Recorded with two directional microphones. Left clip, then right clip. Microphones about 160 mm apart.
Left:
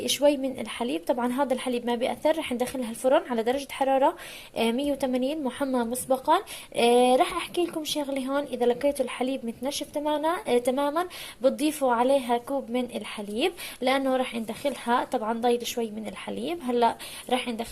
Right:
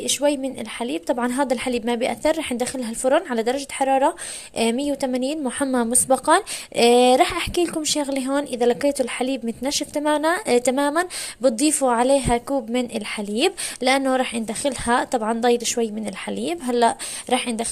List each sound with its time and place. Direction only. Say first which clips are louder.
0.0 s a woman's voice: right 2 dB; 20° right (ahead or behind)
9.7 s a woman's voice: right 7 dB; 40° right (ahead or behind)